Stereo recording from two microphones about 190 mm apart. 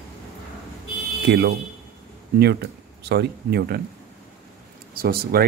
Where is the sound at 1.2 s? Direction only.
60° right (ahead or behind).